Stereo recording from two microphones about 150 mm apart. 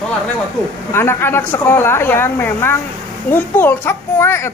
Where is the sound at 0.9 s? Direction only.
15° left (ahead or behind).